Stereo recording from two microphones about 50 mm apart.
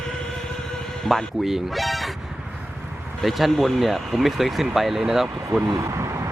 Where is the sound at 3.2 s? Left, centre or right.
Centre.